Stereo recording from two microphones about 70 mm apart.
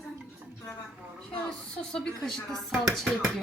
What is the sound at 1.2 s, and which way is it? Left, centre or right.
A woman's voice, centre.